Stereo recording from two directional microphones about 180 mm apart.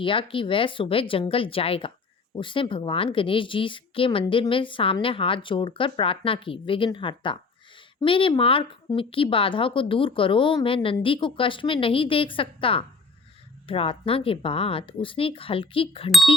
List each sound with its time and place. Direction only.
0.0 s speech: 30° left (ahead or behind)